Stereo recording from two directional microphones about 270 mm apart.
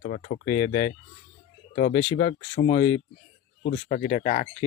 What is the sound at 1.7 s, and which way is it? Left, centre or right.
Speech, left.